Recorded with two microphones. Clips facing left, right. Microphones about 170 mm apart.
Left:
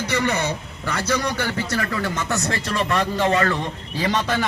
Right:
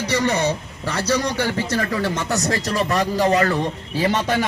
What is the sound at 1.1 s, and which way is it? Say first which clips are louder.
Speech: right 2 dB; 15° right (ahead or behind).